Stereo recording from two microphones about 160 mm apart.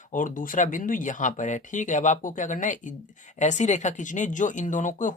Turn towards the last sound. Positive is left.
turn(degrees=50)  # may be behind; listen again after turning